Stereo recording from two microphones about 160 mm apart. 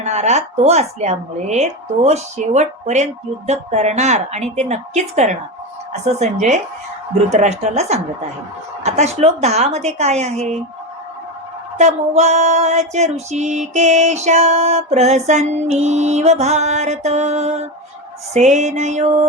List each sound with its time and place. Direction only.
0.0 s speech: 45° right (ahead or behind)
11.8 s speech: 45° right (ahead or behind)